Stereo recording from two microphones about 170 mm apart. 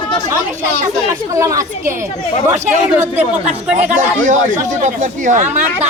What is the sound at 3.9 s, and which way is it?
Speech, 45° right (ahead or behind).